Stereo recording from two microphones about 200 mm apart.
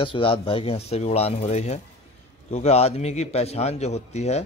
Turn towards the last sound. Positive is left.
turn(degrees=35)  # may be behind; listen again after turning